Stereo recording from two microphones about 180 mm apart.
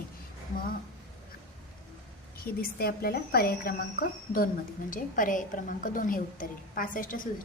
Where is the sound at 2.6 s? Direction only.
60° left (ahead or behind).